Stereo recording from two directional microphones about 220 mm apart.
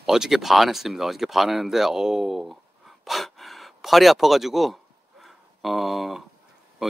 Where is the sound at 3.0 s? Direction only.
Centre (ahead or behind).